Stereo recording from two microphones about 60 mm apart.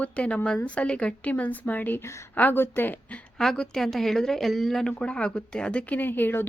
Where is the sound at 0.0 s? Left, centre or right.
Left.